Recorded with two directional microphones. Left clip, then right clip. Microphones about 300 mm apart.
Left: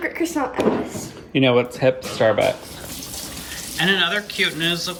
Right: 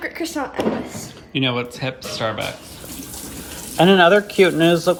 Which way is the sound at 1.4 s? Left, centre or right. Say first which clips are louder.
Left 5 dB; right.